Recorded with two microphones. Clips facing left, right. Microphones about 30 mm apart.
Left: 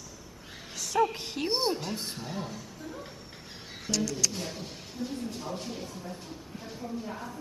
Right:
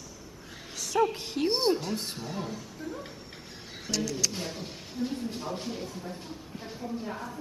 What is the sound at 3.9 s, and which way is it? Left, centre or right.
A woman's voice, centre.